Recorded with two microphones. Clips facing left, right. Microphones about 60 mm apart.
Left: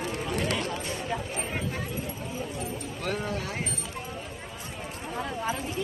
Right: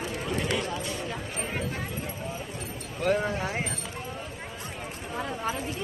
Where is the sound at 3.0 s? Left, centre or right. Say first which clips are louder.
Right 6 dB; right.